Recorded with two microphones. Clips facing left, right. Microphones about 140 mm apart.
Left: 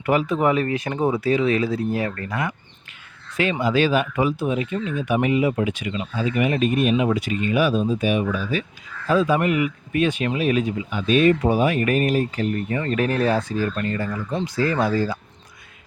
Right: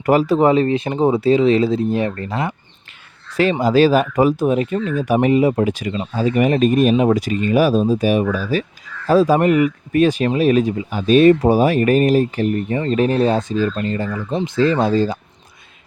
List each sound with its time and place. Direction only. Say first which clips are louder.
0.0 s speech: right 6 dB; 35° right (ahead or behind)